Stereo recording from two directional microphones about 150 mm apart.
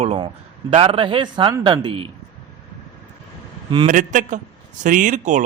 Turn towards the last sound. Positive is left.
turn(degrees=-55)  # may be behind; listen again after turning